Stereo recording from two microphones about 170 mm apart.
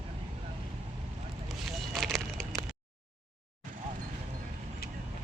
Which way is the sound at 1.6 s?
Centre (ahead or behind).